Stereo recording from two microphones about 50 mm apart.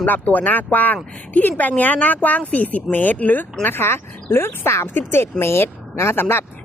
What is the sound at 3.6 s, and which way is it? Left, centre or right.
Speech, left.